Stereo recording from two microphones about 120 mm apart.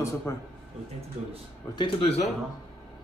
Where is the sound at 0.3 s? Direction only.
25° left (ahead or behind).